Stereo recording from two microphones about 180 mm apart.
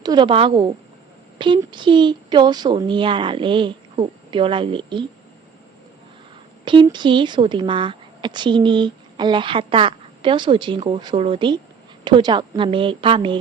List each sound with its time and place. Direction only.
0.0 s speech: 25° right (ahead or behind)
6.7 s speech: 25° right (ahead or behind)